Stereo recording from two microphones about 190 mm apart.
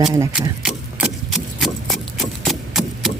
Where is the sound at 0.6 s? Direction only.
5° right (ahead or behind).